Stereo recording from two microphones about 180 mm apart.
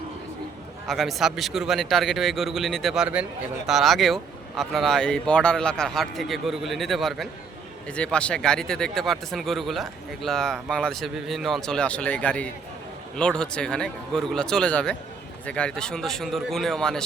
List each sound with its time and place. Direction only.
0.9 s speech: centre (ahead or behind)